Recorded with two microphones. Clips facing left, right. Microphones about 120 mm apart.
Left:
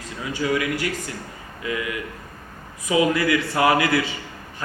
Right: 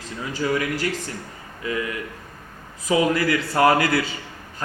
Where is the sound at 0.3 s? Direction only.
35° right (ahead or behind).